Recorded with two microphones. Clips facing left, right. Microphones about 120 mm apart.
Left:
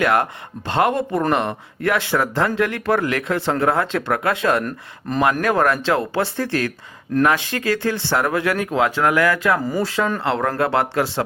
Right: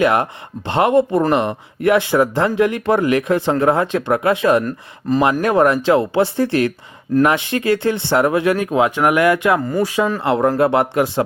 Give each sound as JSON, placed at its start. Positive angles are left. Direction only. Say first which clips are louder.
{"t": 0.0, "sound": "speech", "louder": "right 3 dB", "side_deg": -20}
{"t": 4.6, "sound": "speech", "louder": "right 4 dB", "side_deg": 0}
{"t": 5.4, "sound": "speech", "louder": "right 4 dB", "side_deg": -20}
{"t": 9.6, "sound": "speech", "louder": "right 3 dB", "side_deg": 0}
{"t": 9.8, "sound": "speech", "louder": "right 3 dB", "side_deg": -15}